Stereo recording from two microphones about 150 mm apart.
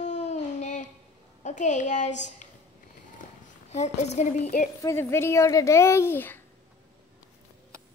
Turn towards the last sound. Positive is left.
turn(degrees=15)  # may be behind; listen again after turning